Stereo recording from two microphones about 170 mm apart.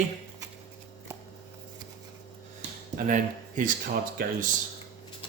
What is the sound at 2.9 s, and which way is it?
Speech, 50° right (ahead or behind).